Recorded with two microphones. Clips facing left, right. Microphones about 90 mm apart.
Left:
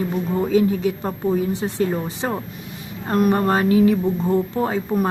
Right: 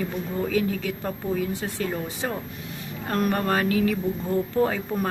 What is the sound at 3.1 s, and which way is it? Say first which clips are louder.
Speech: left 6 dB; 20° left (ahead or behind).